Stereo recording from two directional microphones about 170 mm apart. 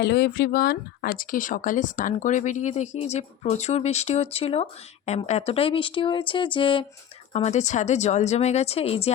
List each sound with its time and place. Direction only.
0.0 s speech: 75° left (ahead or behind); by 6.8 s 30° left (ahead or behind)
7.3 s speech: 40° left (ahead or behind)